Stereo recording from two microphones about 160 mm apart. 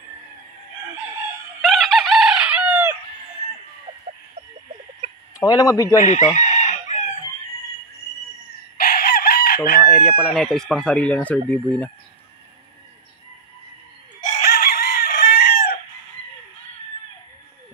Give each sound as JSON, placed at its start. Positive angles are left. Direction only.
{"t": 1.6, "sound": "chicken", "side_deg": 0}
{"t": 5.4, "sound": "a man's voice", "side_deg": 20}
{"t": 5.9, "sound": "chicken", "side_deg": 50}
{"t": 8.7, "sound": "chicken", "side_deg": 65}
{"t": 10.0, "sound": "speech", "side_deg": 5}
{"t": 14.4, "sound": "fowl", "side_deg": 80}
{"t": 15.3, "sound": "chicken", "side_deg": 85}